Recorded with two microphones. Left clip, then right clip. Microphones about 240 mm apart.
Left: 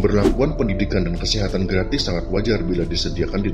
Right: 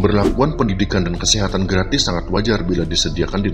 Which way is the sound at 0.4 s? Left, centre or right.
Centre.